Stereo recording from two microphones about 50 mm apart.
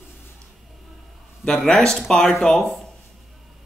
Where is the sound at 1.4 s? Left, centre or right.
Centre.